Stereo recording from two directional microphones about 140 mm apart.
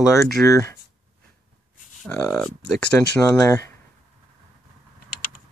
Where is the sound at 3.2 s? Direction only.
25° left (ahead or behind).